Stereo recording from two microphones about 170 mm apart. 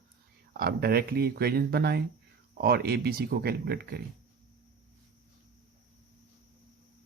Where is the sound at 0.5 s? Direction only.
65° right (ahead or behind).